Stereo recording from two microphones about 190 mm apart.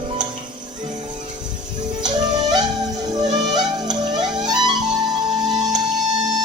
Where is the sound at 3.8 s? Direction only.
20° right (ahead or behind).